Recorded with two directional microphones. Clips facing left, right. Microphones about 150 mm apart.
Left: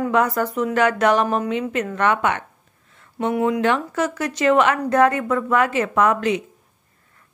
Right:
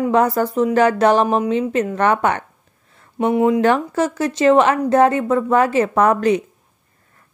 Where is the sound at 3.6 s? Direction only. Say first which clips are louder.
Right 4 dB; 35° right (ahead or behind).